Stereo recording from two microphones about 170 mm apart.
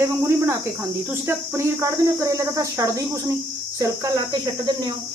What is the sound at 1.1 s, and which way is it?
Speech, 15° right (ahead or behind).